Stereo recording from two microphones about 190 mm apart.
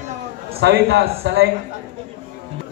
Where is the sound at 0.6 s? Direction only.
60° right (ahead or behind).